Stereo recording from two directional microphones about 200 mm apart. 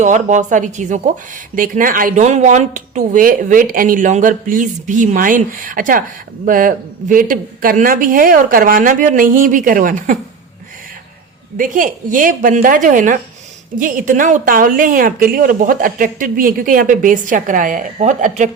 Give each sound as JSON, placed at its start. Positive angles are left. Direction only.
{"t": 0.0, "sound": "a woman's voice", "side_deg": -40}
{"t": 11.5, "sound": "a woman's voice", "side_deg": -40}